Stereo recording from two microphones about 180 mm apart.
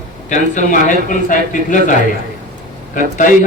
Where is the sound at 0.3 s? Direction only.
45° left (ahead or behind).